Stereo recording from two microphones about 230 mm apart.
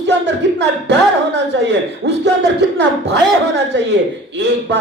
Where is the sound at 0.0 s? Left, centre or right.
Right.